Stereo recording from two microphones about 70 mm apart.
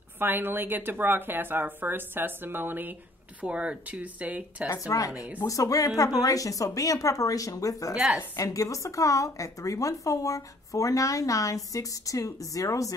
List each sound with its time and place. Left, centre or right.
0.2 s speech: right
3.4 s speech: centre
4.7 s speech: left
5.1 s speech: centre
5.5 s speech: left
7.9 s a woman's voice: centre
8.4 s a woman's voice: left